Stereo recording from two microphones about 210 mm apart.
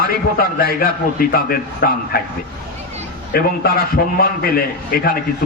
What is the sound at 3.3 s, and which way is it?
A man's voice, 45° left (ahead or behind).